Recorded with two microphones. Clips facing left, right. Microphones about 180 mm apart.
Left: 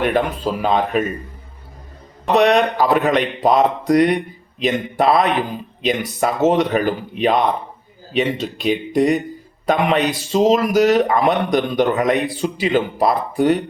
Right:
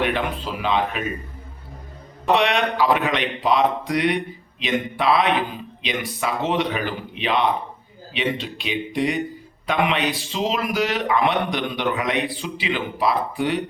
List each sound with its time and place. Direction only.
0.0 s a man's voice: 45° left (ahead or behind)
2.3 s a man's voice: 40° left (ahead or behind)